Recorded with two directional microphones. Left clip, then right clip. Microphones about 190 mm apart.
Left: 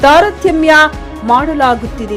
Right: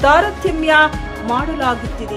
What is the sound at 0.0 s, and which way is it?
Speech, 35° left (ahead or behind).